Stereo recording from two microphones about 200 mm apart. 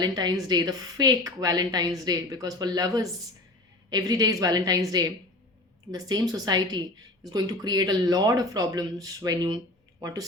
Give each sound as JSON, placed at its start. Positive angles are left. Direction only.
{"t": 0.0, "sound": "a woman's voice", "side_deg": -20}